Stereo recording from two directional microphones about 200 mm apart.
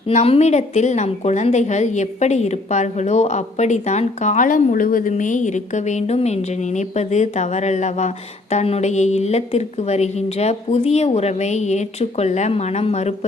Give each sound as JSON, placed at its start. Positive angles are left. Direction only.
{"t": 0.1, "sound": "a woman's voice", "side_deg": 35}